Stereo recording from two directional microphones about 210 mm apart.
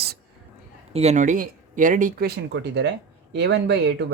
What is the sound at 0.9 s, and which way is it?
Speech, 30° right (ahead or behind).